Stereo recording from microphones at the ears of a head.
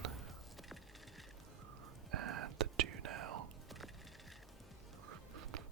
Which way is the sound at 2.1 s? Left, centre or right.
Right.